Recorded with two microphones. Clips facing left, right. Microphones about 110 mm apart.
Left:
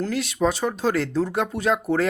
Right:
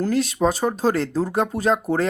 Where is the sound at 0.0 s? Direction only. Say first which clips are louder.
Right 3 dB; 40° right (ahead or behind).